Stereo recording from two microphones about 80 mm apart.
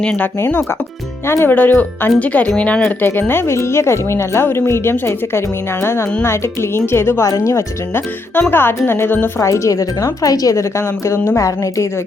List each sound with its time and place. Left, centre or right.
0.0 s speech: centre
0.3 s speech: left
1.5 s speech: left
3.0 s speech: left
7.3 s speech: left
7.9 s speech: left
9.4 s speech: left